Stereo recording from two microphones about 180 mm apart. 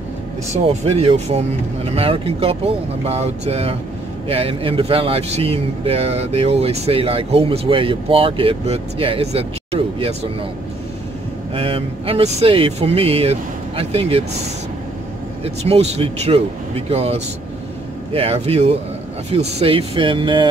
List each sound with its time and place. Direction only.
0.7 s speech: 35° right (ahead or behind)
11.5 s speech: 30° right (ahead or behind)